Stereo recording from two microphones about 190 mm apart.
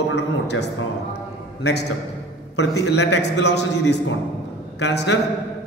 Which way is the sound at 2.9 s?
70° left (ahead or behind).